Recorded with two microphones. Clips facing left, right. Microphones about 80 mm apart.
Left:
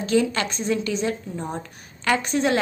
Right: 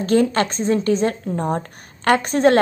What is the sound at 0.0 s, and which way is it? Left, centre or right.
A woman's voice, right.